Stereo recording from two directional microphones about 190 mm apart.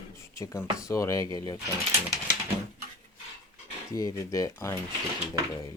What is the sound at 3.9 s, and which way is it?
Speech, 15° left (ahead or behind).